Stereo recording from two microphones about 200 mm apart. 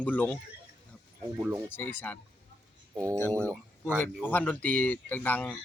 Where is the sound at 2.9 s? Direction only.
15° right (ahead or behind).